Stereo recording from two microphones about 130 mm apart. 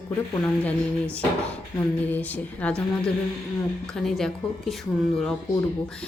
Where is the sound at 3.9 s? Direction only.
Centre (ahead or behind).